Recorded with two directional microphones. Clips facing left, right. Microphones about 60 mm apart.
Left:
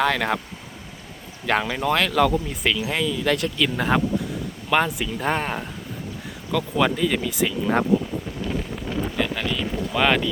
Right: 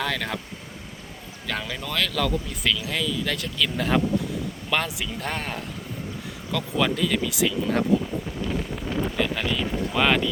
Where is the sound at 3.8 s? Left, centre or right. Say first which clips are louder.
Right 1 dB; centre.